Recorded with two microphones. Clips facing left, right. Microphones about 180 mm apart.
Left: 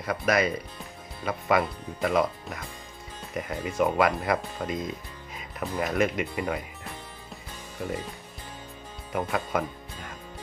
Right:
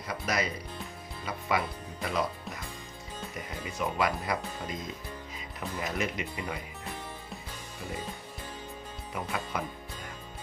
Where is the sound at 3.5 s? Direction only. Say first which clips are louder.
Left 9 dB; 55° left (ahead or behind).